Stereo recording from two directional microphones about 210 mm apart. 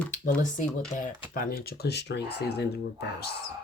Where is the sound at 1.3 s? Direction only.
45° left (ahead or behind).